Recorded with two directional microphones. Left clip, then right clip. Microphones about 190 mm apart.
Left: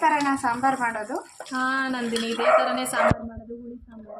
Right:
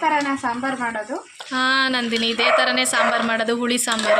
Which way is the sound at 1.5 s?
10° right (ahead or behind).